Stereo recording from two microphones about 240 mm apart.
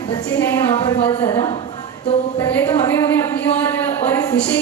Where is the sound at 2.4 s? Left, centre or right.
Centre.